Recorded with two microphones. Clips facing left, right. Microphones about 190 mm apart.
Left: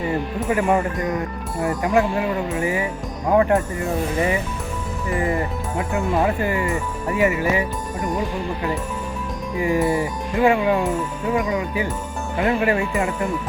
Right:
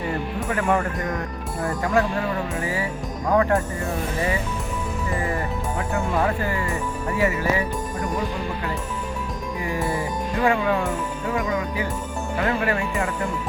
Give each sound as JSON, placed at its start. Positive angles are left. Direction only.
{"t": 0.5, "sound": "speech", "side_deg": 15}
{"t": 5.9, "sound": "speech", "side_deg": 20}
{"t": 9.6, "sound": "speech", "side_deg": 20}